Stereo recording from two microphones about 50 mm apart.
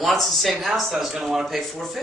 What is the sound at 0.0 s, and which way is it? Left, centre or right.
A man's voice, centre.